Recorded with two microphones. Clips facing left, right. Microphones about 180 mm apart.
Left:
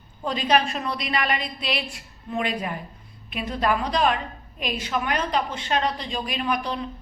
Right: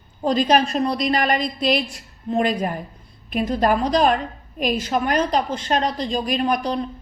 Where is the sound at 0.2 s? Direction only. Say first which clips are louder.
Right 5 dB; 40° right (ahead or behind).